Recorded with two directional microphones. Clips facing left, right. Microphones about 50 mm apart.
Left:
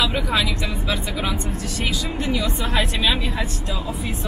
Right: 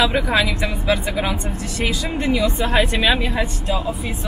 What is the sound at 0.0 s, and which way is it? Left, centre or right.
Speech, centre.